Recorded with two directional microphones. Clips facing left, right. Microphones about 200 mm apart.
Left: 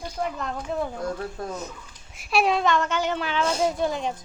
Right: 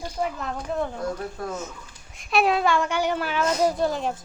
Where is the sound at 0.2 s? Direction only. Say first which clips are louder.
Right 1 dB; centre (ahead or behind).